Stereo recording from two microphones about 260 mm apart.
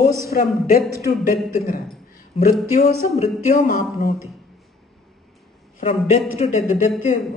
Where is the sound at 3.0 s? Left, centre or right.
Left.